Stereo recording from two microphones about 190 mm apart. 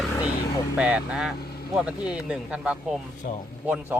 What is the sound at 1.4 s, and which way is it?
Vehicle, 55° left (ahead or behind).